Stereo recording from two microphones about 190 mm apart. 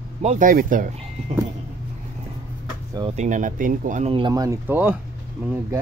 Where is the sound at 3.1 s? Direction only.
40° right (ahead or behind); by 5.0 s 10° right (ahead or behind).